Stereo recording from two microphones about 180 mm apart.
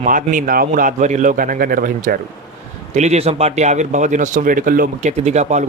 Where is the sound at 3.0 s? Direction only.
35° right (ahead or behind).